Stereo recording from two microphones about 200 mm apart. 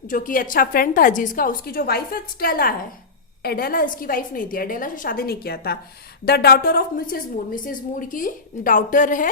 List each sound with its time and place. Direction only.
0.1 s a woman's voice: 40° left (ahead or behind)